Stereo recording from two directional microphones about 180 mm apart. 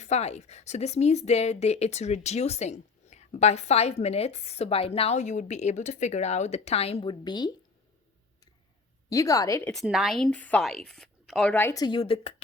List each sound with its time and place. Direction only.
0.0 s speech: 40° left (ahead or behind)
9.0 s a woman's voice: 20° left (ahead or behind)
9.7 s speech: 5° right (ahead or behind); by 12.3 s 30° left (ahead or behind)